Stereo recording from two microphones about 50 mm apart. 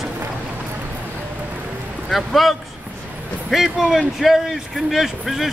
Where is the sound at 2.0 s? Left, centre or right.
Centre.